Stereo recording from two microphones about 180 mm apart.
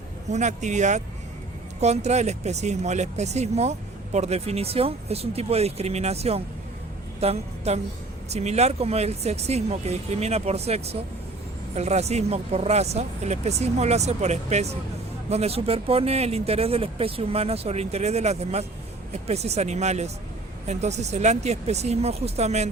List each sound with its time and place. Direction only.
0.3 s a woman's voice: 40° right (ahead or behind)